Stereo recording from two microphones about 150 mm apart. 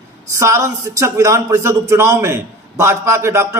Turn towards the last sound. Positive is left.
turn(degrees=-15)  # may be behind; listen again after turning